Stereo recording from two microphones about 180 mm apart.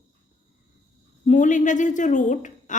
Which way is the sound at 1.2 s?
45° left (ahead or behind).